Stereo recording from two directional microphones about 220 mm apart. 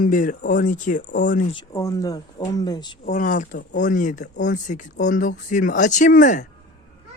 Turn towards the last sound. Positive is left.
turn(degrees=35)  # may be behind; listen again after turning